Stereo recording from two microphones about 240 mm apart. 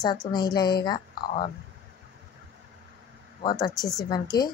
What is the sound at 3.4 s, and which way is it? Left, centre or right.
Speech, centre.